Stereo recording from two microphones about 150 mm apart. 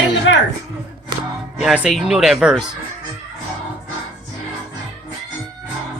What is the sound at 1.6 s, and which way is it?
Speech, 5° right (ahead or behind).